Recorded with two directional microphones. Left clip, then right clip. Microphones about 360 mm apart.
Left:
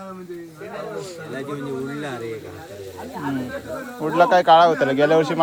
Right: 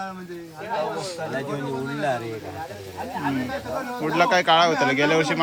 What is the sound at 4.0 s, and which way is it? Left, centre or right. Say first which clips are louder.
Speech: left 4 dB; centre.